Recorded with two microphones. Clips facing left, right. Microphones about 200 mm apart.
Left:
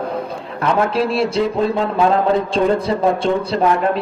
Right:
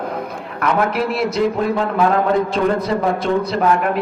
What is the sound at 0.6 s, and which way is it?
Speech, 30° left (ahead or behind).